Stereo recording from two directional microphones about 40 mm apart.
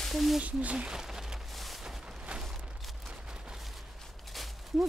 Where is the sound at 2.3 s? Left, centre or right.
Right.